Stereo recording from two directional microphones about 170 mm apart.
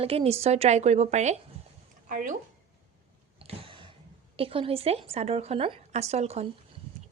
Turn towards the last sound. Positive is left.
turn(degrees=-40)  # may be behind; listen again after turning